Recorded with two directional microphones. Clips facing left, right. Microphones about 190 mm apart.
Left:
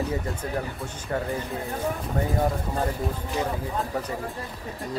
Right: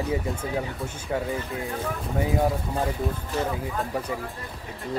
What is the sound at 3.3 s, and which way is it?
Speech, 15° left (ahead or behind).